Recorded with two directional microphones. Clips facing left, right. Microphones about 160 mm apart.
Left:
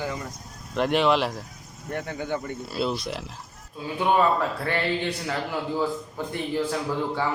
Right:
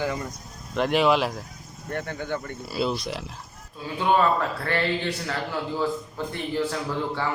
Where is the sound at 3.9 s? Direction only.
15° left (ahead or behind).